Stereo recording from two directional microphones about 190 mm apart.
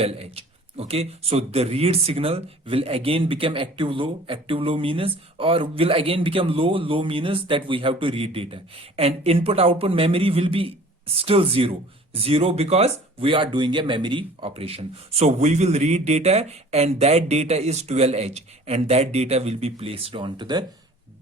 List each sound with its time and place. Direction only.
0.0 s a man's voice: 30° right (ahead or behind)